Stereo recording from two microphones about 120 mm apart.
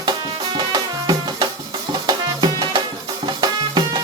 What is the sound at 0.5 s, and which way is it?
Music, 35° right (ahead or behind).